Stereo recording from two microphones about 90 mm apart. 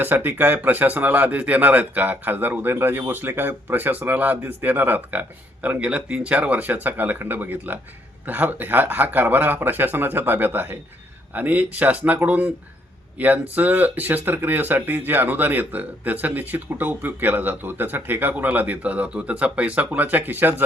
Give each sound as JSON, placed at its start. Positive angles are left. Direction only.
{"t": 0.0, "sound": "speech", "side_deg": -20}